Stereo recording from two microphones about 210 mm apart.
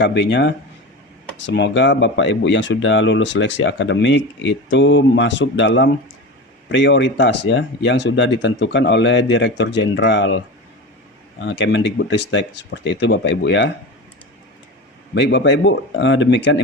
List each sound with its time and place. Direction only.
0.0 s speech: 55° left (ahead or behind)
15.1 s speech: 55° left (ahead or behind)